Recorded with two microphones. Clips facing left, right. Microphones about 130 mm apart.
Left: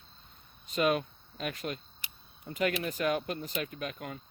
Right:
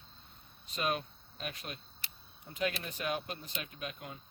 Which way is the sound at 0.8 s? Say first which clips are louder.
Left 7 dB; 85° left.